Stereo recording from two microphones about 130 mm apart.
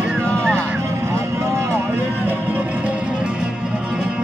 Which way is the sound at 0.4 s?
20° right (ahead or behind).